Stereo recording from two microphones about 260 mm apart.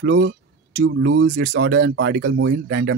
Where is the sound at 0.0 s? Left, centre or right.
Right.